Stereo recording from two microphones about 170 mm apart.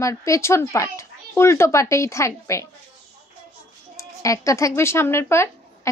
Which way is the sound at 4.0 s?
20° left (ahead or behind).